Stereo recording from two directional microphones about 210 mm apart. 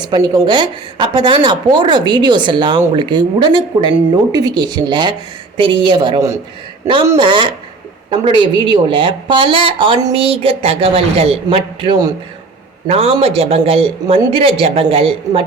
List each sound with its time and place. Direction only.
0.0 s speech: 20° right (ahead or behind)